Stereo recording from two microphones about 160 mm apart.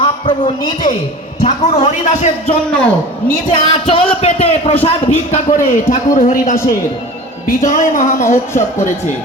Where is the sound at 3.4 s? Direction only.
30° left (ahead or behind).